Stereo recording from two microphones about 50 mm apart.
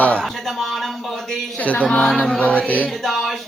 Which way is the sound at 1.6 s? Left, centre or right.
Left.